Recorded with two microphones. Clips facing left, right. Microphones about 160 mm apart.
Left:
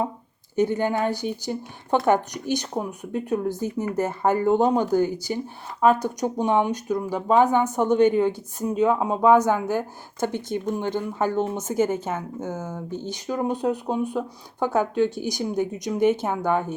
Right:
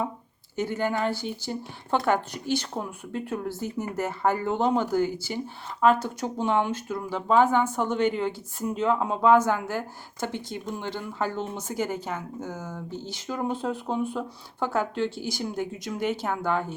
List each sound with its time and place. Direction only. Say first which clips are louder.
0.5 s speech: left 5 dB; 20° left (ahead or behind)